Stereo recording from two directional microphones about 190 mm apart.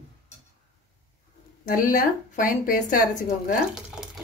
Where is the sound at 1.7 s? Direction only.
45° left (ahead or behind).